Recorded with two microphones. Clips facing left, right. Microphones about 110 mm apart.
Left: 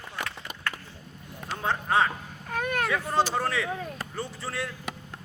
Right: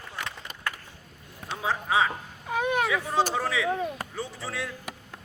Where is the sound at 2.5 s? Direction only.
15° right (ahead or behind).